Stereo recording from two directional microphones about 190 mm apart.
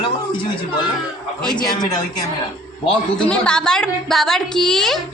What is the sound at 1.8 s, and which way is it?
Speech, 20° left (ahead or behind).